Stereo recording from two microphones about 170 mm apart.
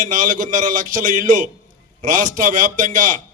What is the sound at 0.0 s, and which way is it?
A man's voice, 50° right (ahead or behind).